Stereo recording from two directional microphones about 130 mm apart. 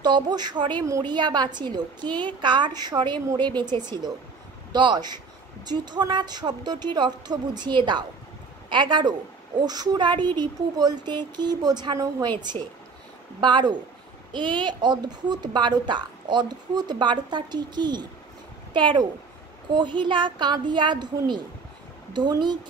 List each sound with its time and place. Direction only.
0.0 s a woman's voice: 35° right (ahead or behind)